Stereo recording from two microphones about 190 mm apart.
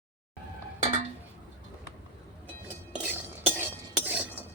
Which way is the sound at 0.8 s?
40° right (ahead or behind).